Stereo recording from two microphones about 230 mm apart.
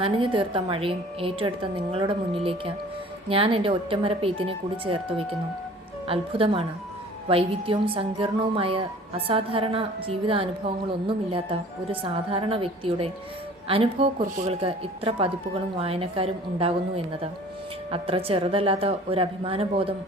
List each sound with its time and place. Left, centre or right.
0.0 s speech: right